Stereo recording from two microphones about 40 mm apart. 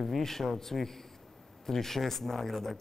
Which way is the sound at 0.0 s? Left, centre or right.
Centre.